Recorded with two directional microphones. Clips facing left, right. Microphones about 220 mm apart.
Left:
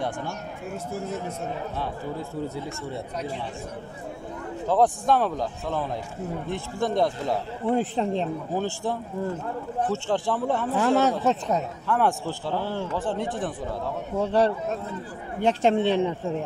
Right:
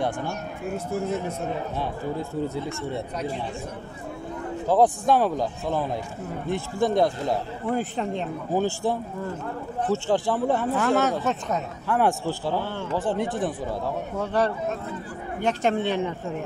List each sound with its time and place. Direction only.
4.6 s a man's voice: 5° right (ahead or behind)
7.6 s speech: 30° left (ahead or behind)
8.5 s a man's voice: 5° right (ahead or behind)
10.8 s speech: 30° left (ahead or behind)
11.9 s a man's voice: 5° right (ahead or behind)
14.2 s a man's voice: 30° left (ahead or behind)